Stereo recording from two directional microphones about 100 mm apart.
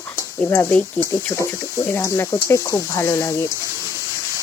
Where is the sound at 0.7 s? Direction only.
15° left (ahead or behind).